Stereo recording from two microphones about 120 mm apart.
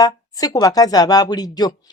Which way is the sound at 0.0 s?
30° left (ahead or behind).